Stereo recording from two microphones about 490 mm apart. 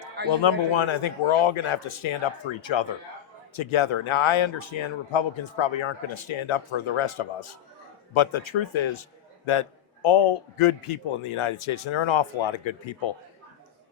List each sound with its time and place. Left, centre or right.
0.3 s speech: left
9.5 s speech: left